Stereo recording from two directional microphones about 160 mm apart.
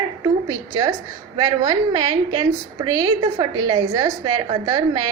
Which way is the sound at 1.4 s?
25° right (ahead or behind).